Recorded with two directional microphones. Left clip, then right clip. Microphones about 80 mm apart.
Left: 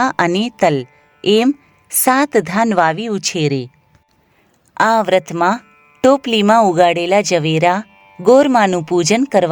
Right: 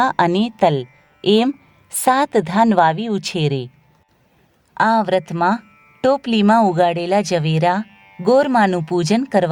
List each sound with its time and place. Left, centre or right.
0.0 s speech: left
4.7 s speech: left